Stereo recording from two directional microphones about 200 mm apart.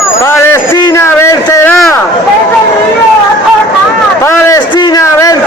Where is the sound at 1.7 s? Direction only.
Centre (ahead or behind).